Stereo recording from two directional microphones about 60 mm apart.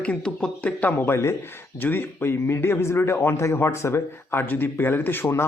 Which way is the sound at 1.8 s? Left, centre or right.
Left.